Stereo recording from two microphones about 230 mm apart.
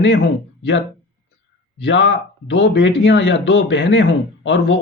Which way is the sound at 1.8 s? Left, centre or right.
Left.